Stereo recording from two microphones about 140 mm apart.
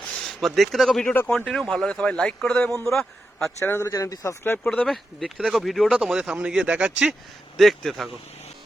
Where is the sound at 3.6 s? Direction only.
20° left (ahead or behind).